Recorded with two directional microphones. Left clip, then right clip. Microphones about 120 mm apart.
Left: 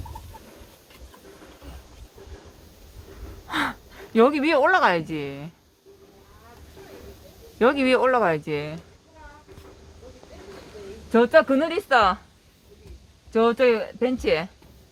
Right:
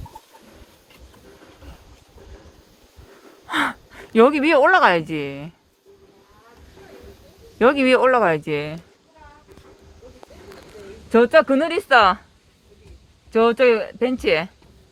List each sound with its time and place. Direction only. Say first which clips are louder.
3.4 s speech: right 4 dB; 40° right (ahead or behind)
7.6 s speech: right 4 dB; 45° right (ahead or behind)
11.1 s speech: right 3 dB; 60° right (ahead or behind)
13.3 s speech: right 4 dB; 60° right (ahead or behind)